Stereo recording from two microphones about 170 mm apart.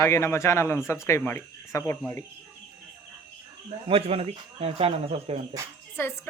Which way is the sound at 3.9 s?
35° right (ahead or behind).